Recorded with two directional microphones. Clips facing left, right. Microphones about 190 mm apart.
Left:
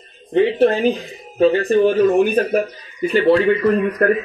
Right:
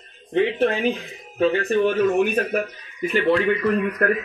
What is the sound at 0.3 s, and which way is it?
Speech, 35° left (ahead or behind).